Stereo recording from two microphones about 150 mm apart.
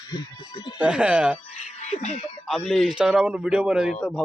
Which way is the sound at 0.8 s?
10° right (ahead or behind).